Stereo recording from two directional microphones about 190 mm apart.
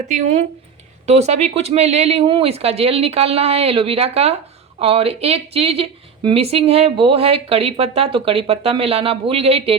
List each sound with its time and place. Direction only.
0.1 s speech: 40° right (ahead or behind)